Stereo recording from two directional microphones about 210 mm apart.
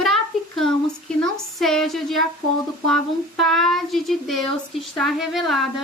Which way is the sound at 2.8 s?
Centre (ahead or behind).